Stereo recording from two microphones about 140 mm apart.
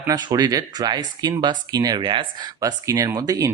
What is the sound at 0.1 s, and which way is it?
Speech, 30° right (ahead or behind).